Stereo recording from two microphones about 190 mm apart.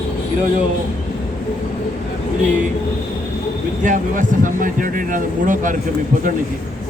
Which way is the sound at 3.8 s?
45° right (ahead or behind).